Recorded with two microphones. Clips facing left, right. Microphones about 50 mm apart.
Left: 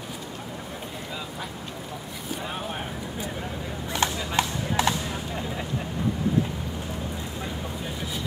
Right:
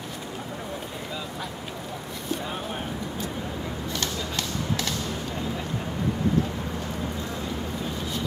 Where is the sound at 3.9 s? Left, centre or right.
Left.